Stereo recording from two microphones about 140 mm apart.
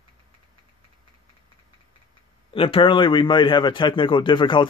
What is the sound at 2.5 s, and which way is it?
A man's voice, 40° left (ahead or behind).